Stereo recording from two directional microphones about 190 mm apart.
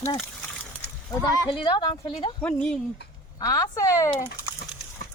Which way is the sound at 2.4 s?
5° left (ahead or behind).